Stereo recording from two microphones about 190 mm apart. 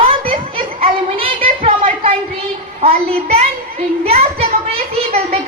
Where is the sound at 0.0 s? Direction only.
30° right (ahead or behind).